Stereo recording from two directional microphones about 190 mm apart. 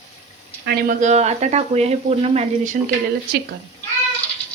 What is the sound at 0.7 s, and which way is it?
Speech, 45° right (ahead or behind).